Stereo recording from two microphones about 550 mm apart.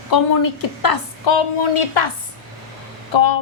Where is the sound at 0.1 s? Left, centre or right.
Left.